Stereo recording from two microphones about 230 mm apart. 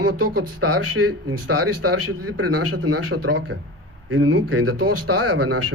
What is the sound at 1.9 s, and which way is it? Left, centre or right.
Speech, right.